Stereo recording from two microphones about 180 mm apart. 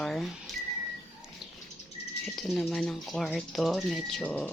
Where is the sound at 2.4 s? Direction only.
Centre (ahead or behind).